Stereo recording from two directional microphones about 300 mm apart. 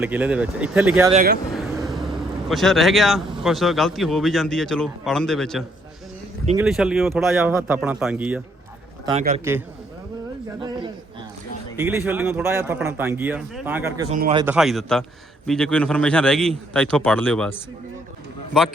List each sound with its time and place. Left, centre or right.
0.0 s a man's voice: centre
1.1 s speech: right
1.5 s a man's voice: centre
9.4 s speech: centre
14.1 s speech: right
14.4 s a man's voice: centre